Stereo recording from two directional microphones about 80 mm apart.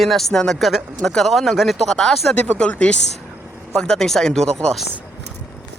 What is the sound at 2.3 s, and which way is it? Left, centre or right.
Speech, centre.